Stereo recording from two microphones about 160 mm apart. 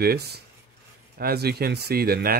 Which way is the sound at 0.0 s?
80° right.